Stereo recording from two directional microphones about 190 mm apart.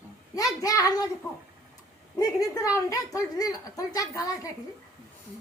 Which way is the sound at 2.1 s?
20° left (ahead or behind).